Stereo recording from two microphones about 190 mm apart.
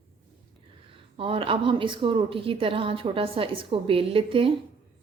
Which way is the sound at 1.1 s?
30° right (ahead or behind).